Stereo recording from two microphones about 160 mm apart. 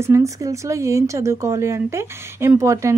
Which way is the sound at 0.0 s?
20° right (ahead or behind).